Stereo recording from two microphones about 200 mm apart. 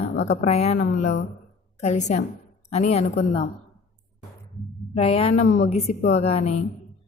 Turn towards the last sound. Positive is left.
turn(degrees=30)  # may be behind; listen again after turning